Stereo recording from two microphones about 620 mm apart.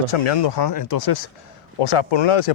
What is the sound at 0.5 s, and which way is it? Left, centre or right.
Speech, left.